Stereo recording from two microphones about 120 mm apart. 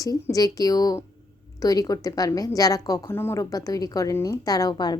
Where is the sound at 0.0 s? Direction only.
30° left (ahead or behind).